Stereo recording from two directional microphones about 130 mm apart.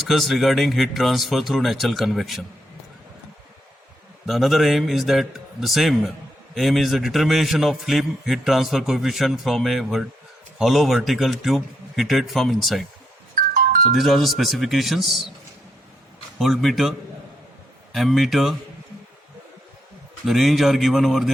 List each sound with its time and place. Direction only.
0.0 s a man's voice: centre (ahead or behind)
4.3 s a man's voice: centre (ahead or behind)
13.9 s a man's voice: centre (ahead or behind)
16.4 s a man's voice: centre (ahead or behind)
17.9 s a man's voice: centre (ahead or behind)
20.2 s a man's voice: centre (ahead or behind)